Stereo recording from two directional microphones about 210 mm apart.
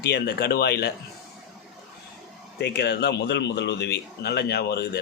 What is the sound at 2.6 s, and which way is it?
Speech, 50° left (ahead or behind).